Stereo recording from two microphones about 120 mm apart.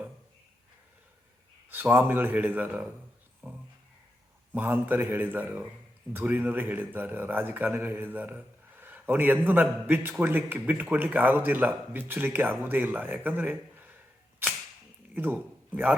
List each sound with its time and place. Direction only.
1.7 s a man's voice: 15° right (ahead or behind)
3.4 s a sound: 15° right (ahead or behind)
4.5 s a man's voice: 15° right (ahead or behind)
14.4 s cap gun: 20° right (ahead or behind)
15.1 s a man's voice: 15° right (ahead or behind)